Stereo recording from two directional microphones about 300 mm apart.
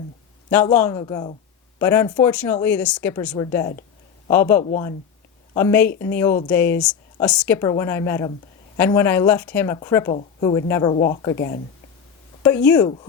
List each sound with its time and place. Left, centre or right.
0.5 s speech: centre
11.3 s speech: left
12.4 s speech: centre